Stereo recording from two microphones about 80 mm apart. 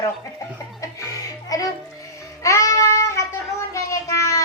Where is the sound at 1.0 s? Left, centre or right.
Left.